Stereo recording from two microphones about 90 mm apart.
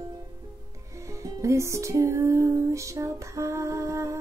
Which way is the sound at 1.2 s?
35° right (ahead or behind).